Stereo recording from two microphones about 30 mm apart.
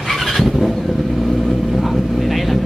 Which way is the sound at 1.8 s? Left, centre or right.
Centre.